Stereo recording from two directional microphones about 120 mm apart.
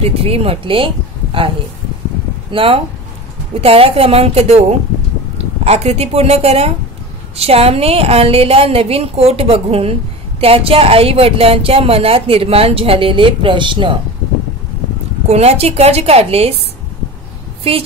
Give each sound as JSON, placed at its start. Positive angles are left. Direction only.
{"t": 0.0, "sound": "speech", "side_deg": -55}
{"t": 2.5, "sound": "a woman's voice", "side_deg": -50}
{"t": 15.2, "sound": "a woman's voice", "side_deg": -60}